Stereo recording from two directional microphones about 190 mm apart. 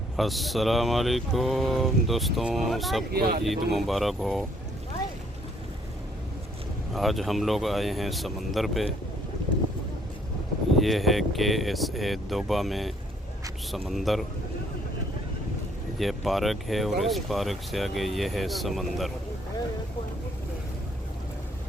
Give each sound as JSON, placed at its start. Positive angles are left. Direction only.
{"t": 0.2, "sound": "speech", "side_deg": 0}
{"t": 3.1, "sound": "speech", "side_deg": -55}
{"t": 3.4, "sound": "speech", "side_deg": 0}
{"t": 6.9, "sound": "speech", "side_deg": 0}
{"t": 10.8, "sound": "speech", "side_deg": 0}
{"t": 16.0, "sound": "speech", "side_deg": 0}